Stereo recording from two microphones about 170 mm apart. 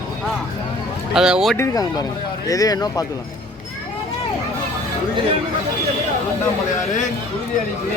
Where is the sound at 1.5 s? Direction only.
20° left (ahead or behind).